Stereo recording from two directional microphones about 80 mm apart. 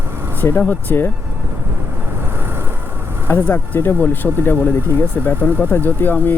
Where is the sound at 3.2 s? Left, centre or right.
Left.